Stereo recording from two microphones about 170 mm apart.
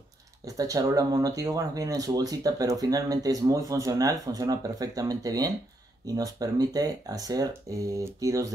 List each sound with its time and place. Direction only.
0.6 s speech: 20° right (ahead or behind)